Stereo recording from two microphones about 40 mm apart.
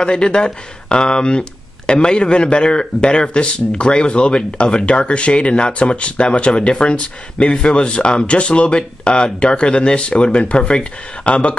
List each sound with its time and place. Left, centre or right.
0.0 s speech: left